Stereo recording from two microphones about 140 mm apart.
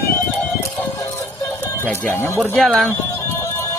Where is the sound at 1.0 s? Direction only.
25° left (ahead or behind).